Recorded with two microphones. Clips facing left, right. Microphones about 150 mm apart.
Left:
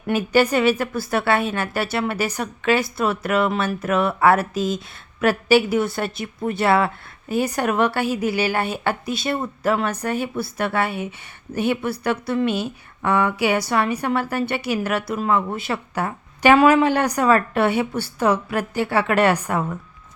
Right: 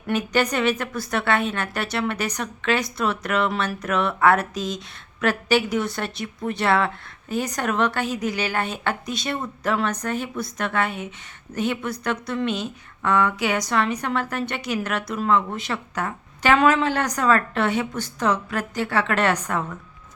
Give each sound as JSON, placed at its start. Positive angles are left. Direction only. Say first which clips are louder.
{"t": 0.1, "sound": "a woman's voice", "louder": "left 4 dB", "side_deg": 5}